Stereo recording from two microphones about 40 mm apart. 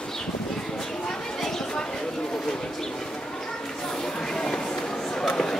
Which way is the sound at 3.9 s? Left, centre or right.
Centre.